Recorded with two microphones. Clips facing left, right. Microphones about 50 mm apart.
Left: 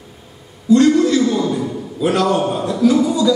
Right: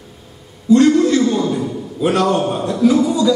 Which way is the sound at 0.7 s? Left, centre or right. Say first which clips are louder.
Right 1 dB; centre.